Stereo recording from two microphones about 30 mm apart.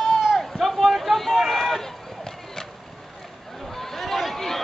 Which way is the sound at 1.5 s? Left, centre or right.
Centre.